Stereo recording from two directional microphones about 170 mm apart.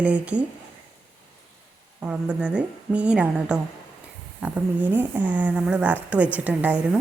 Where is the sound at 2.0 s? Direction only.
5° right (ahead or behind).